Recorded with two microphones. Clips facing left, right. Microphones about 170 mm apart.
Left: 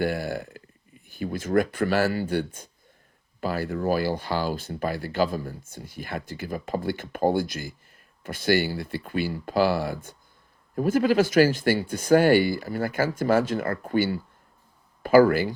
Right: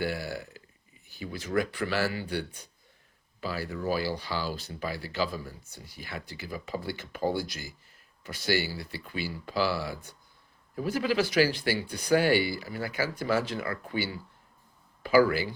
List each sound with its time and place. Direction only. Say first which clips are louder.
0.0 s speech: left 6 dB; 50° left (ahead or behind)